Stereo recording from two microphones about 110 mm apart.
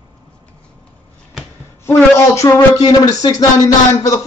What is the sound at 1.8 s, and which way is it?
Speech, 25° left (ahead or behind).